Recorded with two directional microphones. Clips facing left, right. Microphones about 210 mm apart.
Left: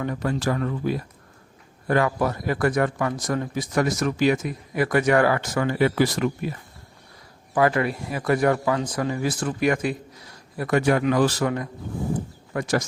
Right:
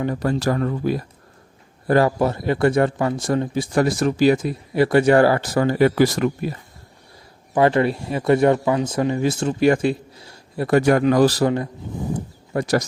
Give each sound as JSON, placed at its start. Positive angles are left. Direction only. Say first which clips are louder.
{"t": 0.0, "sound": "speech", "louder": "right 4 dB", "side_deg": -35}
{"t": 7.5, "sound": "speech", "louder": "right 4 dB", "side_deg": -25}